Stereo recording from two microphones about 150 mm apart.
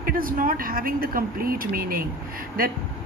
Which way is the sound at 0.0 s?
70° right (ahead or behind).